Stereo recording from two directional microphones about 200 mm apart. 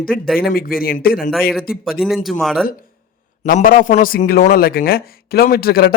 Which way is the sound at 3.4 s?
40° left (ahead or behind).